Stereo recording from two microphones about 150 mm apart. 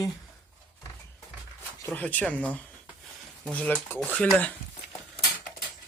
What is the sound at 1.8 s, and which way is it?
Speech, 10° left (ahead or behind).